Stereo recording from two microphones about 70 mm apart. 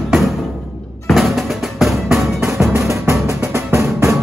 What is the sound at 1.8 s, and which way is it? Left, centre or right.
Music, centre.